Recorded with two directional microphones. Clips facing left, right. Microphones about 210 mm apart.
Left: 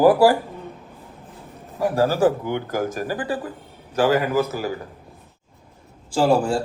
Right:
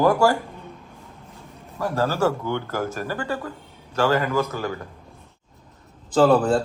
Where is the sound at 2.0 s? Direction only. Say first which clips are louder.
Left 3 dB; 15° left (ahead or behind).